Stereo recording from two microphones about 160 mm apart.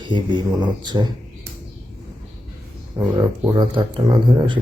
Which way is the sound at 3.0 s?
25° right (ahead or behind).